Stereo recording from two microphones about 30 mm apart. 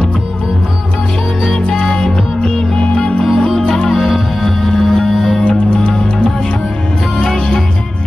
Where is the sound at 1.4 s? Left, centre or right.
Centre; by 3.3 s left.